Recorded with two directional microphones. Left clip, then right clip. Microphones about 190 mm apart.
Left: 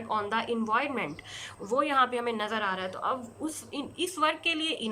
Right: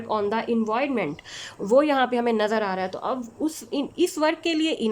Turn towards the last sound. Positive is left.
turn(degrees=-30)  # may be behind; listen again after turning